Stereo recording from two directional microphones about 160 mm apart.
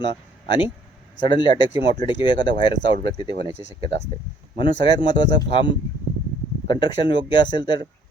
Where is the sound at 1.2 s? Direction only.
30° left (ahead or behind).